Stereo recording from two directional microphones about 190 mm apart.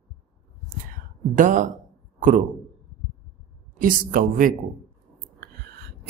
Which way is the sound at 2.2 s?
40° right (ahead or behind).